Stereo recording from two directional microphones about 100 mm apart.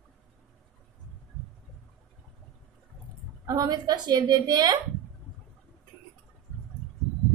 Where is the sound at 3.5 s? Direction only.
40° right (ahead or behind).